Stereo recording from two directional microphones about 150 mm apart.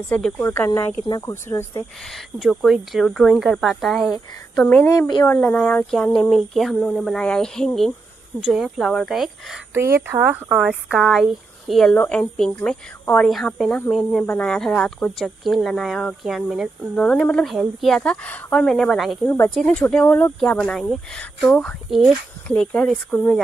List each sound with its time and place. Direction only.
0.1 s speech: 10° left (ahead or behind)
2.3 s speech: centre (ahead or behind)
4.6 s speech: 10° left (ahead or behind)
4.9 s speech: 25° left (ahead or behind)
5.2 s speech: 10° left (ahead or behind)
9.8 s speech: 15° right (ahead or behind); by 19.1 s centre (ahead or behind)
19.2 s speech: 15° left (ahead or behind)